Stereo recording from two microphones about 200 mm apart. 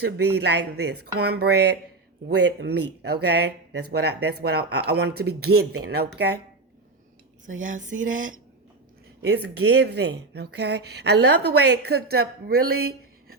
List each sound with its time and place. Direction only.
0.0 s a woman's voice: 55° right (ahead or behind)
7.4 s speech: 40° right (ahead or behind)
7.9 s speech: 75° right (ahead or behind)
9.2 s a woman's voice: 55° right (ahead or behind)